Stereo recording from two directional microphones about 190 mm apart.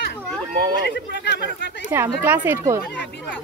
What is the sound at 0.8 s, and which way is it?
Speech, 65° left (ahead or behind).